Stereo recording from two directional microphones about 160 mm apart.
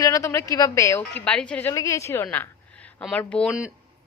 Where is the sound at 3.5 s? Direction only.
5° right (ahead or behind).